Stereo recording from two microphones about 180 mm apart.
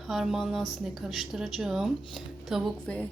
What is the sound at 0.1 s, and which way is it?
Speech, centre (ahead or behind).